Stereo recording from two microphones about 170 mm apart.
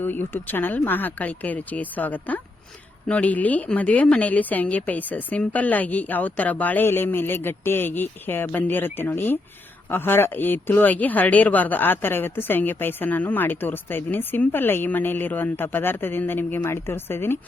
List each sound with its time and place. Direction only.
0.0 s speech: 10° left (ahead or behind)